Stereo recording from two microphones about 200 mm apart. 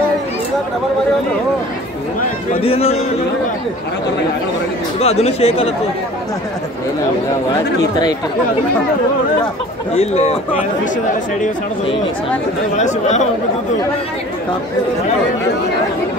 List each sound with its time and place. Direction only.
2.6 s a man's voice: 30° left (ahead or behind)
5.0 s speech: 30° left (ahead or behind)
9.9 s speech: 35° left (ahead or behind)
12.7 s speech: 35° left (ahead or behind)